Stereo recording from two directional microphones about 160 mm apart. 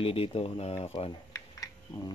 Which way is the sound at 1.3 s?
25° left (ahead or behind).